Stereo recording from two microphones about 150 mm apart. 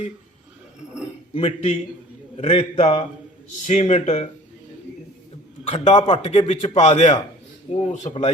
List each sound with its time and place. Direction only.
1.3 s a man's voice: 40° left (ahead or behind)
5.6 s a man's voice: 45° left (ahead or behind)